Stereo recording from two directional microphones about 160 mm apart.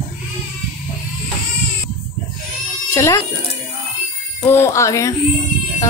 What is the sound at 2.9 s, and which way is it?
Speech, 20° left (ahead or behind).